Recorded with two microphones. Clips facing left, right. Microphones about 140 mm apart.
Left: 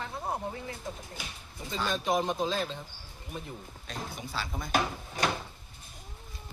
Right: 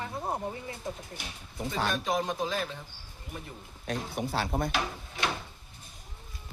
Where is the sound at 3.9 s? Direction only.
60° right (ahead or behind).